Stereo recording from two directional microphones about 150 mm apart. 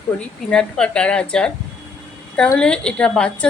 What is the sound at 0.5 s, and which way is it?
Speech, 5° left (ahead or behind).